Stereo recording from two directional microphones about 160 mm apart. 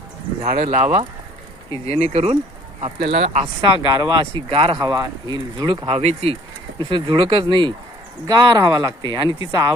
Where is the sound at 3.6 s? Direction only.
25° right (ahead or behind).